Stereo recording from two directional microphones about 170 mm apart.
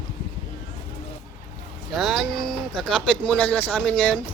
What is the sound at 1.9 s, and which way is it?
Speech, centre (ahead or behind).